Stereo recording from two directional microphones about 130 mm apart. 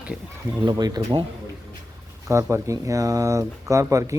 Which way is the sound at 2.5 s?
25° right (ahead or behind).